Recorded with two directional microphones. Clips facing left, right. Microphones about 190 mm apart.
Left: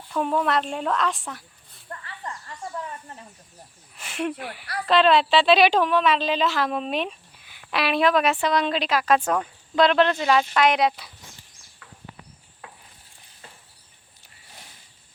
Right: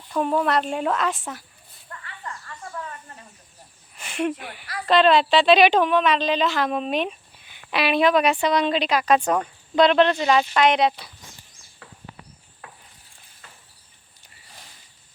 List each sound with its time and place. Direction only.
0.2 s a woman's voice: centre (ahead or behind)
1.9 s snake: 35° left (ahead or behind)
3.9 s a woman's voice: centre (ahead or behind)